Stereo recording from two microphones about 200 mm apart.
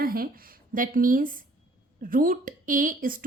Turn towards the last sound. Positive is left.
turn(degrees=-45)  # may be behind; listen again after turning